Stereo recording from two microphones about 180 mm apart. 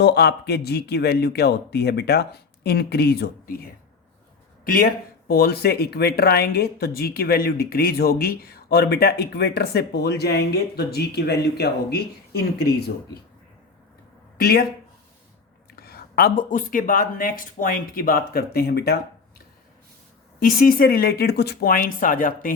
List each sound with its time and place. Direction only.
0.0 s speech: 65° left (ahead or behind)
4.6 s speech: 55° left (ahead or behind)
14.3 s speech: 60° left (ahead or behind)
15.7 s speech: 60° left (ahead or behind)
20.4 s speech: 55° left (ahead or behind)